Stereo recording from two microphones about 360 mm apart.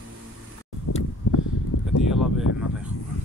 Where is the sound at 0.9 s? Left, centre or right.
Left.